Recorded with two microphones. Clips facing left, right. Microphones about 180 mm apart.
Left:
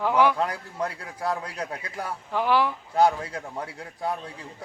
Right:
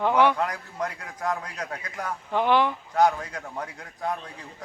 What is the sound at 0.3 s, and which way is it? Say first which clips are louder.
A man's voice: left 1 dB; 30° left (ahead or behind).